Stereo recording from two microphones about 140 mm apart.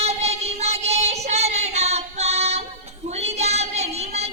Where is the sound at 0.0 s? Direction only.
50° right (ahead or behind).